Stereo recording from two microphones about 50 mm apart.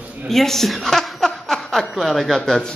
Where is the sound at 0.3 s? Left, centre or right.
Centre.